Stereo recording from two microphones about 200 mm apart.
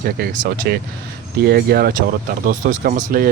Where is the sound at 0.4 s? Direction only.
50° right (ahead or behind).